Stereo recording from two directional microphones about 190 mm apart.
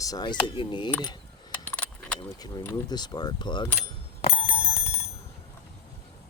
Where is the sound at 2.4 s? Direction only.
20° left (ahead or behind).